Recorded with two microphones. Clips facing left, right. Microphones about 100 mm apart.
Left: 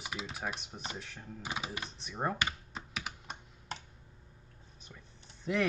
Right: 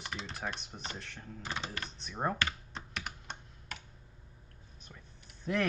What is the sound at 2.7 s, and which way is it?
Computer keyboard, 5° left (ahead or behind).